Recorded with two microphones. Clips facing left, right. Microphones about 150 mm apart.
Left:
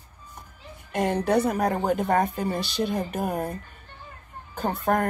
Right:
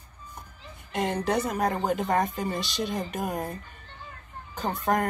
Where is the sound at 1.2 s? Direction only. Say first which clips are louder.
Left 4 dB; 55° left (ahead or behind).